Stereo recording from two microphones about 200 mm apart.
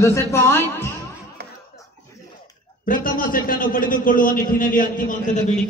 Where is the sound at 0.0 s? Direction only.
15° left (ahead or behind).